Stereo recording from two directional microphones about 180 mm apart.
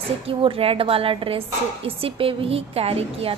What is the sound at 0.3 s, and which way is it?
A woman's voice, 30° right (ahead or behind).